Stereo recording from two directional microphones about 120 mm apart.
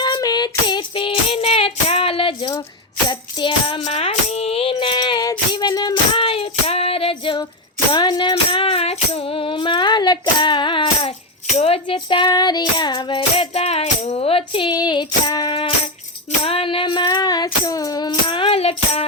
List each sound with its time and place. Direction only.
0.0 s female singing: 35° left (ahead or behind)
3.1 s music: 40° left (ahead or behind)
3.8 s music: 60° left (ahead or behind); by 8.4 s 35° left (ahead or behind)
8.4 s a sound: 50° left (ahead or behind)
11.5 s child singing: 55° left (ahead or behind); by 14.2 s 75° left (ahead or behind)
14.2 s tambourine: 50° left (ahead or behind)
14.8 s female singing: 35° left (ahead or behind)
16.4 s child singing: 50° left (ahead or behind)